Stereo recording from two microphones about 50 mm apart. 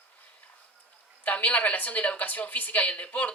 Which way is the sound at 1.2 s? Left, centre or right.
Left.